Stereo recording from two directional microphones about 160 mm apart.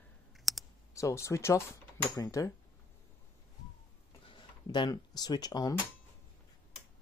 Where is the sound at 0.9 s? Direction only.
20° left (ahead or behind).